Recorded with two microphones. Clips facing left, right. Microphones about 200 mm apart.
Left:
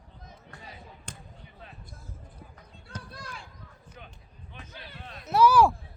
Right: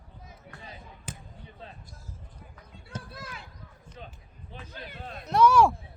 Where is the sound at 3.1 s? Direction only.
5° right (ahead or behind).